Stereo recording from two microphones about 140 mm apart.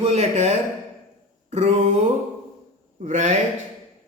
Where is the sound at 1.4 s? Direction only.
50° right (ahead or behind).